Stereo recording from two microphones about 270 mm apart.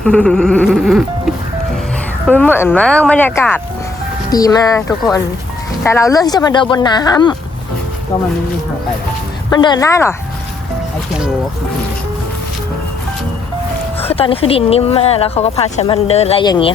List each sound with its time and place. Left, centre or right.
0.0 s speech: centre
9.5 s speech: centre
14.0 s speech: left